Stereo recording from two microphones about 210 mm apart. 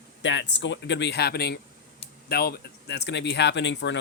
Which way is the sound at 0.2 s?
60° left (ahead or behind).